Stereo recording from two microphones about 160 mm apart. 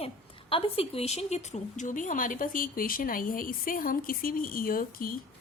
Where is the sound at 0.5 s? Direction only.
35° left (ahead or behind).